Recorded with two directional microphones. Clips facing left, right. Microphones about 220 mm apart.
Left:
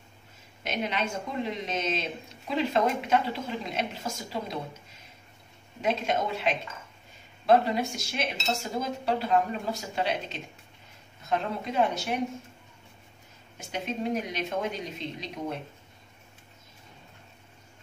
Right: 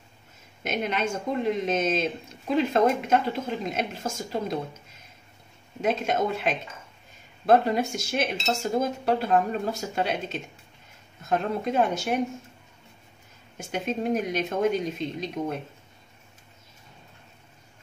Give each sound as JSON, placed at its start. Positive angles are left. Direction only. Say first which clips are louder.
{"t": 0.7, "sound": "a woman's voice", "louder": "right 3 dB", "side_deg": -50}
{"t": 5.8, "sound": "a woman's voice", "louder": "right 3 dB", "side_deg": -50}
{"t": 13.6, "sound": "a woman's voice", "louder": "right 4 dB", "side_deg": -50}